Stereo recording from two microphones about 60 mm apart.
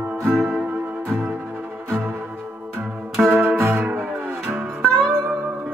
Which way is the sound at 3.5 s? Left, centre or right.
Right.